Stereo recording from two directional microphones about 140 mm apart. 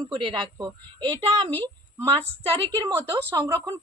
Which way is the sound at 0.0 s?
30° right (ahead or behind).